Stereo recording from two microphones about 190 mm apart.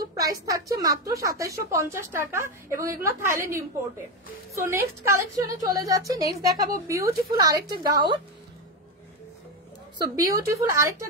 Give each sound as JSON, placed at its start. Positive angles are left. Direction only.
{"t": 0.0, "sound": "a woman's voice", "side_deg": -20}
{"t": 9.9, "sound": "a woman's voice", "side_deg": -20}